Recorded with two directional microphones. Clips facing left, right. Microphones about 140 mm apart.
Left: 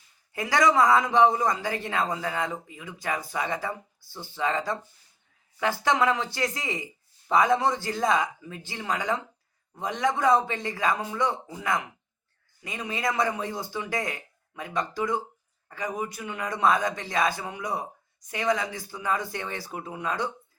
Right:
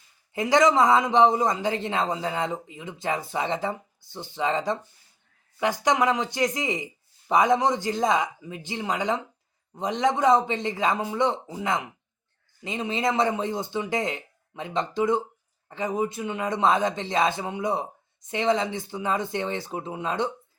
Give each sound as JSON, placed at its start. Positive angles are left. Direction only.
{"t": 0.3, "sound": "speech", "side_deg": -20}